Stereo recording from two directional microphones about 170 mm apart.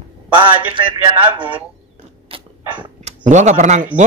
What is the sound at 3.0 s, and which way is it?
Speech, 45° right (ahead or behind).